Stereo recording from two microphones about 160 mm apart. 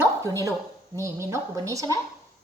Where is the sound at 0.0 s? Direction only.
20° right (ahead or behind).